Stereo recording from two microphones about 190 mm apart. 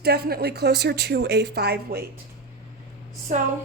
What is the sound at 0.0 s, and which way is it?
Speech, 55° right (ahead or behind).